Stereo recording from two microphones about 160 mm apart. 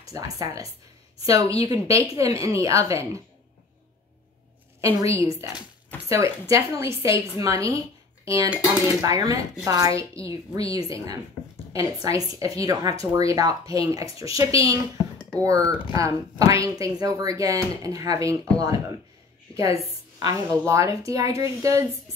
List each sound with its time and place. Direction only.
0.0 s speech: 20° right (ahead or behind)
5.0 s speech: 20° right (ahead or behind)
9.0 s a woman's voice: 20° right (ahead or behind)